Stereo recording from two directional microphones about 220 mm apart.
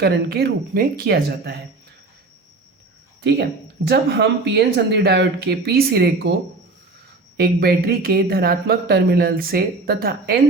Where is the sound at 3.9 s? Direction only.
50° right (ahead or behind).